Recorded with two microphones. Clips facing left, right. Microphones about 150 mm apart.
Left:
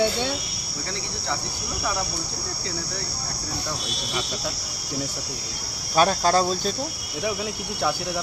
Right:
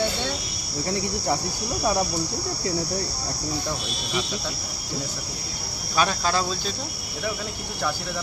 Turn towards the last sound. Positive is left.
turn(degrees=40)  # may be behind; listen again after turning